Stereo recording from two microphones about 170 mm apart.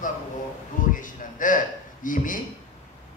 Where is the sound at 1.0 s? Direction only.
50° left (ahead or behind).